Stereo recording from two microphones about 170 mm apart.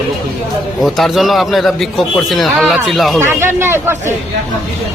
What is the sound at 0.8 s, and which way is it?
A man's voice, centre (ahead or behind).